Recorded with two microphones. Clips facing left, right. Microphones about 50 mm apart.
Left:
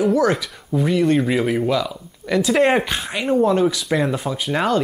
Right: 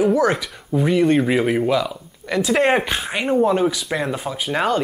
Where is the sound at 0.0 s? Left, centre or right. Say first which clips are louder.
Even; centre.